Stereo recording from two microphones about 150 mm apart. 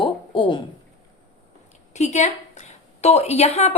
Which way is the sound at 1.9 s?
50° left (ahead or behind).